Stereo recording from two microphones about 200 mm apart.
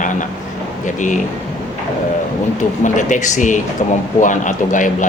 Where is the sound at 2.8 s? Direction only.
40° left (ahead or behind).